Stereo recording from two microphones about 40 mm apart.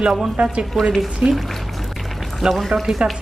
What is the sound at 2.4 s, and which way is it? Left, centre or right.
Speech, centre.